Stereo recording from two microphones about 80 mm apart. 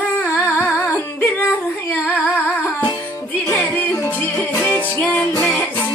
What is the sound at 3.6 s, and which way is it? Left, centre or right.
Music, left.